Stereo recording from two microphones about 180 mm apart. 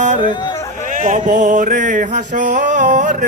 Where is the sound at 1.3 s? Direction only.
45° right (ahead or behind).